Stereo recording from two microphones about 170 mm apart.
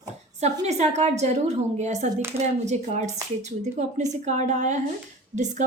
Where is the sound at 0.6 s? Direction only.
40° right (ahead or behind).